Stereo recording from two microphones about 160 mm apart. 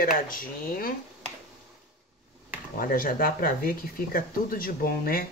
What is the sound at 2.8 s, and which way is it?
Speech, 60° left (ahead or behind).